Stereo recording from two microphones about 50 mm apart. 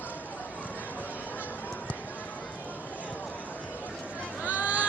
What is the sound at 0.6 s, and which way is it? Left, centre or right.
Run, left.